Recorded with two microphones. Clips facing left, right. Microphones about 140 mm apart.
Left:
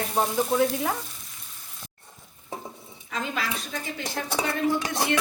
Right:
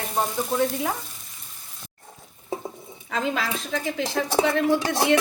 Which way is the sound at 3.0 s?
90° right.